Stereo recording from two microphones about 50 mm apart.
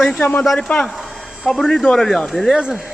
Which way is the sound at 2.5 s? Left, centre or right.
Centre.